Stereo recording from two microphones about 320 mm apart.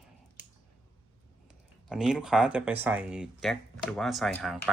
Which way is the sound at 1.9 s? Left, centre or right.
Centre.